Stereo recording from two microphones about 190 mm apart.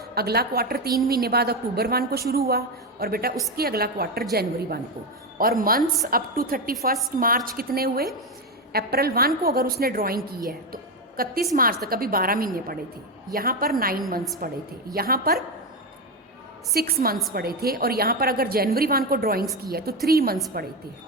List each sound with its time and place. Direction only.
0.1 s a woman's voice: 55° right (ahead or behind)
11.2 s a woman's voice: 50° right (ahead or behind)
16.7 s a woman's voice: 50° right (ahead or behind)